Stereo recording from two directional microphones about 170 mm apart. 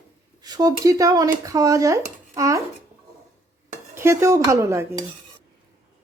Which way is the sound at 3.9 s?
15° right (ahead or behind).